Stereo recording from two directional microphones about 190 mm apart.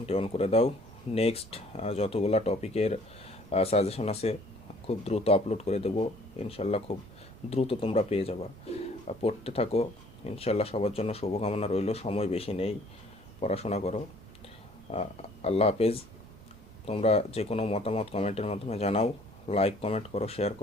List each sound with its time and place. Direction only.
0.0 s speech: 30° left (ahead or behind)